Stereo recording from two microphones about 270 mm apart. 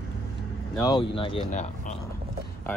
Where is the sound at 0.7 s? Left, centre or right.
Centre.